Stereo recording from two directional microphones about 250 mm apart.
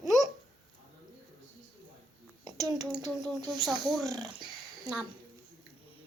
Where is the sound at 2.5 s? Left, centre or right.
Centre.